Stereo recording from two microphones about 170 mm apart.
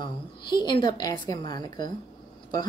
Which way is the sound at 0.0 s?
25° left (ahead or behind).